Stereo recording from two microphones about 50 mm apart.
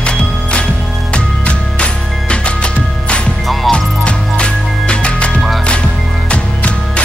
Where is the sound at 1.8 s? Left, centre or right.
Left.